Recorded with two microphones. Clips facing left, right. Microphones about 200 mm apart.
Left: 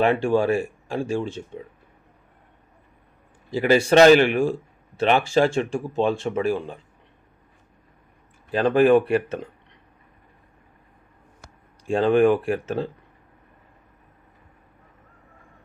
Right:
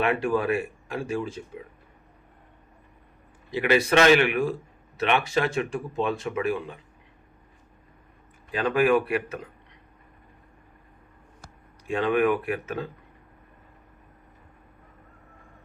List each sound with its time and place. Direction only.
0.0 s a man's voice: 30° left (ahead or behind)
3.5 s a man's voice: 30° left (ahead or behind)
8.5 s a man's voice: 30° left (ahead or behind)
11.9 s a man's voice: 30° left (ahead or behind)